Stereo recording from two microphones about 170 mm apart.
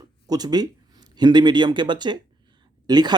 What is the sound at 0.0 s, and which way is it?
Speech, 25° right (ahead or behind).